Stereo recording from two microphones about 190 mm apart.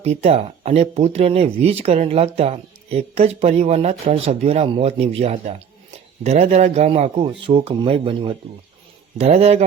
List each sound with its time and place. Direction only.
0.0 s speech: 35° right (ahead or behind)